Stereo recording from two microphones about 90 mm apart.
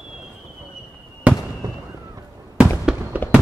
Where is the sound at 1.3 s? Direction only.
15° right (ahead or behind).